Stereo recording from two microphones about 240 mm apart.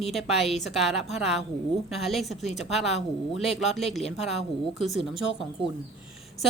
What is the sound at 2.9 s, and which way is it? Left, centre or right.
Speech, left.